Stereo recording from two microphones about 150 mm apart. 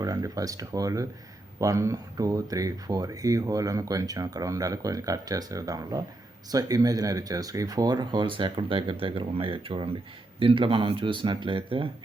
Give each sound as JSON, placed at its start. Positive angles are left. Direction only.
{"t": 0.0, "sound": "speech", "side_deg": -25}